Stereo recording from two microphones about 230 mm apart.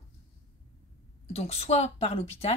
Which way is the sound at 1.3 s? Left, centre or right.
Left.